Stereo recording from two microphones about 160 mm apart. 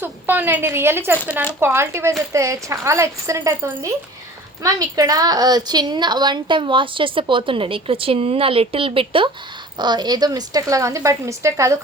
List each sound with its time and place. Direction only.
0.0 s a woman's voice: 10° right (ahead or behind)